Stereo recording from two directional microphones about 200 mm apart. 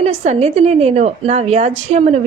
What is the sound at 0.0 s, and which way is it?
A woman's voice, 35° right (ahead or behind).